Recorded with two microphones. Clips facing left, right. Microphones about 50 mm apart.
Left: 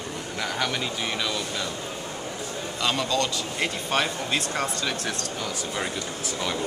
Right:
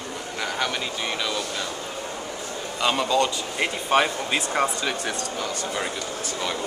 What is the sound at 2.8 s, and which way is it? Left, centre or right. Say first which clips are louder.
A man's voice: right 4 dB; centre.